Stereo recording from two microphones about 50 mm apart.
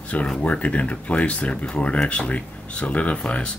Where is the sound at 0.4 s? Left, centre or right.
Left.